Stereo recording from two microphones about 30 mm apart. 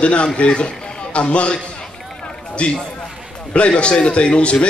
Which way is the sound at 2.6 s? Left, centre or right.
Left.